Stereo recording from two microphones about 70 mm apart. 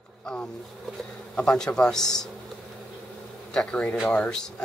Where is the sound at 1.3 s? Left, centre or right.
Centre.